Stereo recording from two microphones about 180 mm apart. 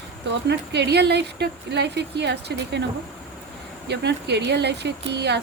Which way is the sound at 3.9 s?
70° right (ahead or behind).